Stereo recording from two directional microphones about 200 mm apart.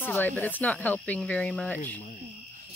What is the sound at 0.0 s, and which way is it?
A woman's voice, 10° left (ahead or behind).